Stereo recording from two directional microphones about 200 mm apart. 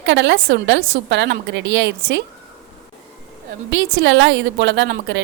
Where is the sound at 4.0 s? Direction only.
65° right (ahead or behind).